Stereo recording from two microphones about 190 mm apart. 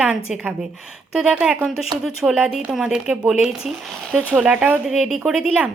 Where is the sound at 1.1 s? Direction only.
5° right (ahead or behind).